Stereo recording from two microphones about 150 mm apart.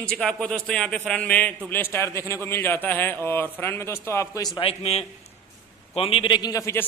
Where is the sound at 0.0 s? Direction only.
5° left (ahead or behind).